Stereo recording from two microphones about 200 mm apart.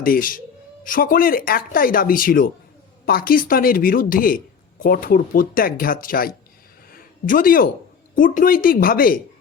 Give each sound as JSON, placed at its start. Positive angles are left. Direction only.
{"t": 0.0, "sound": "speech", "side_deg": 45}
{"t": 6.9, "sound": "a sound", "side_deg": 45}
{"t": 8.1, "sound": "speech", "side_deg": 40}